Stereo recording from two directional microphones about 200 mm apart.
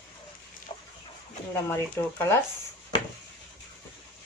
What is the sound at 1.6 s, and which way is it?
Speech, 15° left (ahead or behind).